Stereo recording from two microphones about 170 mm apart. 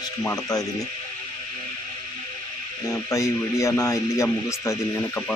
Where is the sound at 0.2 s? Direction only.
20° left (ahead or behind).